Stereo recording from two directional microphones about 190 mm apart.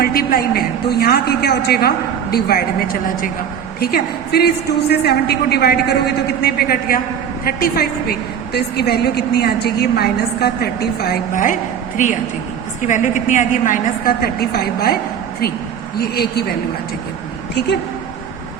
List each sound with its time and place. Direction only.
0.0 s a woman's voice: 50° left (ahead or behind)
16.0 s a woman's voice: 55° left (ahead or behind)